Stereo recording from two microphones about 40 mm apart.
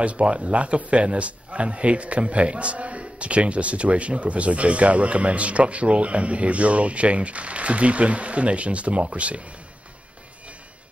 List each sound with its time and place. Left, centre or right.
0.0 s a man's voice: right